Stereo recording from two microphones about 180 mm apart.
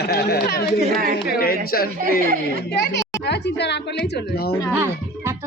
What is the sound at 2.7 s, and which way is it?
A woman's voice, 65° left (ahead or behind).